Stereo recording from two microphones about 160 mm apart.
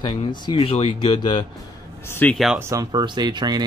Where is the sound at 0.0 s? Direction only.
30° left (ahead or behind).